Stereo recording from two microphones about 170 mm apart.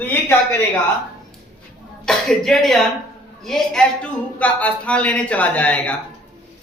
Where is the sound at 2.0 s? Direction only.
Centre (ahead or behind).